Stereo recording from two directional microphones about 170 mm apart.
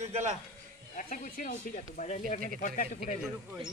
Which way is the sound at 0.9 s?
50° left (ahead or behind).